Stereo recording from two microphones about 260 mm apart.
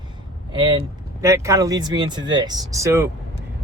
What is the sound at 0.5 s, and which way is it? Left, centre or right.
Speech, centre.